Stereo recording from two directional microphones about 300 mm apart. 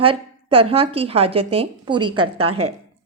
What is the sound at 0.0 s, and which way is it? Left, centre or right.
Speech, centre.